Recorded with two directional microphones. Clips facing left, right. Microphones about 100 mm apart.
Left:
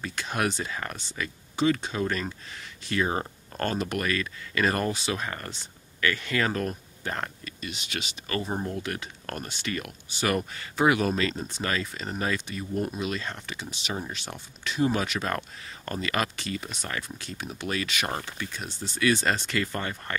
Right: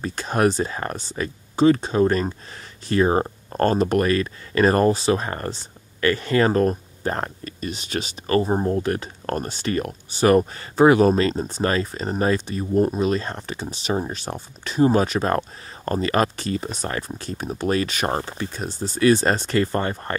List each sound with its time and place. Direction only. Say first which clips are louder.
0.0 s speech: right 8 dB; 40° right (ahead or behind)